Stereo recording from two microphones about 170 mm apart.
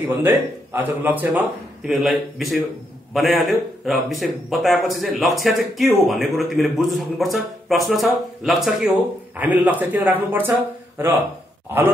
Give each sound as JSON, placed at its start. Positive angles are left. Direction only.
{"t": 0.0, "sound": "a man's voice", "side_deg": -10}